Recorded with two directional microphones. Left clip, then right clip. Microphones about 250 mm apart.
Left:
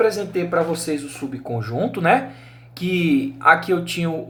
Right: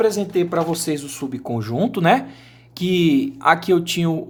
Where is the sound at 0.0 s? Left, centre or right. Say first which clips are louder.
Right 1 dB; right.